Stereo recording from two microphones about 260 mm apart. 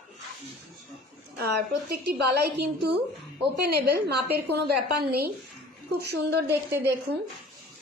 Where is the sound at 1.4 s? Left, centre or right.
Right.